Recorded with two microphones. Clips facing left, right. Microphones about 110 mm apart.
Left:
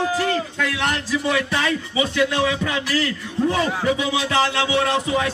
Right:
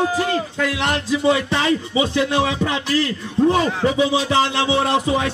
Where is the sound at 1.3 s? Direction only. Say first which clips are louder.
Right 3 dB; 25° right (ahead or behind).